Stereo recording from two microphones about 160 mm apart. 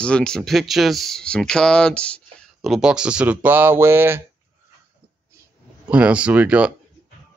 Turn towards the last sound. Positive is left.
turn(degrees=-10)  # may be behind; listen again after turning